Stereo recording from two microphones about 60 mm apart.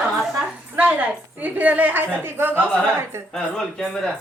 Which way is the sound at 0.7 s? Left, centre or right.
Right.